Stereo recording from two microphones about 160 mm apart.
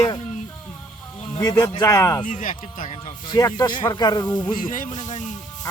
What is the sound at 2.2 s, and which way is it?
Speech, 50° left (ahead or behind).